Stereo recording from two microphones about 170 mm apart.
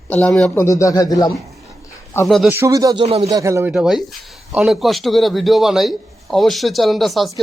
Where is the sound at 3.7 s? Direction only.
5° right (ahead or behind).